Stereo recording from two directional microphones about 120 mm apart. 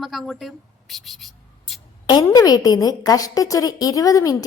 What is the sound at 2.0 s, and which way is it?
A woman's voice, 40° left (ahead or behind).